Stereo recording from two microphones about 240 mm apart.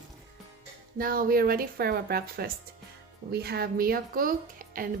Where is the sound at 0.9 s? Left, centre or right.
Right.